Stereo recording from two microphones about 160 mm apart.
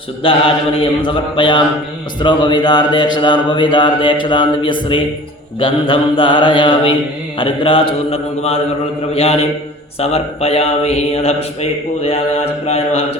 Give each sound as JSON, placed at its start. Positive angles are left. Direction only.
{"t": 0.2, "sound": "speech", "side_deg": 35}